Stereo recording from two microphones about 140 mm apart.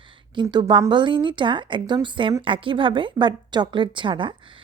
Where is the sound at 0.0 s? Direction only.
35° right (ahead or behind).